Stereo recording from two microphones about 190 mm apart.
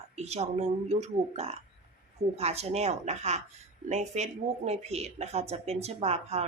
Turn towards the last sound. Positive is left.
turn(degrees=-35)  # may be behind; listen again after turning